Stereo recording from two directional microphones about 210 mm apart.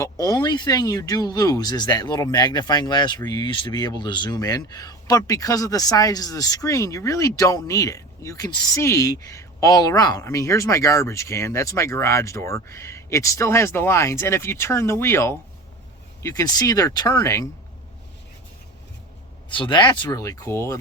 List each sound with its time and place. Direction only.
0.0 s speech: 15° left (ahead or behind)
16.4 s speech: 15° left (ahead or behind)
19.5 s speech: 25° left (ahead or behind)